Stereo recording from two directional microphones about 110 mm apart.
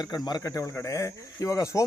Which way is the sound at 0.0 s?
40° left (ahead or behind).